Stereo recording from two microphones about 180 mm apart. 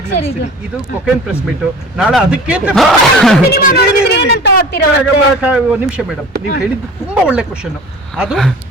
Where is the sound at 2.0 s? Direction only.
Centre (ahead or behind).